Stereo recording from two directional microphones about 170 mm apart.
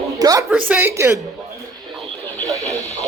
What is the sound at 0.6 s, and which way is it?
Speech, 10° right (ahead or behind).